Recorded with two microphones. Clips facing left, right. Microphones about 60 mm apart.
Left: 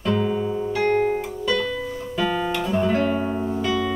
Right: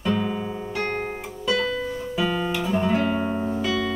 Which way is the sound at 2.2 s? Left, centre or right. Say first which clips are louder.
Left 2 dB; centre.